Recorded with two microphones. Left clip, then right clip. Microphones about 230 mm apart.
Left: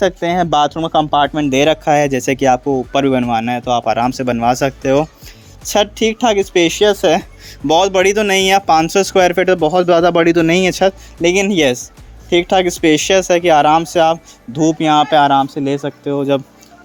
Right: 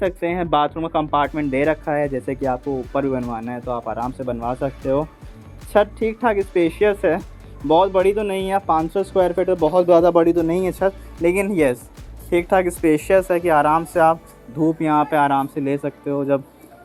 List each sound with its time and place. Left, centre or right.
0.0 s speech: left